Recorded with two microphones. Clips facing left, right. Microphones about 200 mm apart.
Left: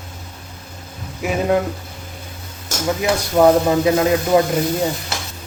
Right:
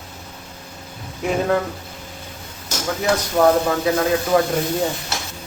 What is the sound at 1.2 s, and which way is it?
Speech, 5° left (ahead or behind).